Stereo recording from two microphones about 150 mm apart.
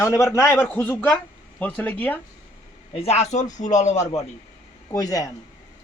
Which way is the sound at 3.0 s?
45° left (ahead or behind).